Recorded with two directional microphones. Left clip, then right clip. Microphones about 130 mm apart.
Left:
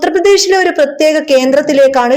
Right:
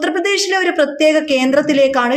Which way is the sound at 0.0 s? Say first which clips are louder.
Left 7 dB; 25° left (ahead or behind).